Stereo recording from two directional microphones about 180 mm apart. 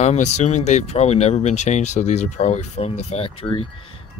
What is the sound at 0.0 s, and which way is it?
Speech, 40° left (ahead or behind).